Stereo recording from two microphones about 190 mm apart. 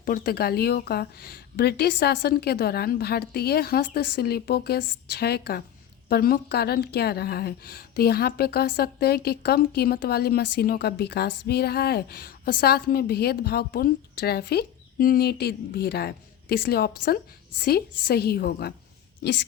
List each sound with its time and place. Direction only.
0.0 s a woman's voice: 50° left (ahead or behind)